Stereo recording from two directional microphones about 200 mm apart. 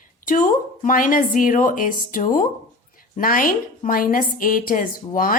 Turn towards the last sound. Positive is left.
turn(degrees=45)  # may be behind; listen again after turning